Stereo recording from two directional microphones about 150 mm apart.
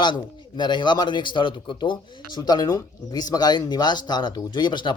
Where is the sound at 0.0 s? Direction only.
30° left (ahead or behind).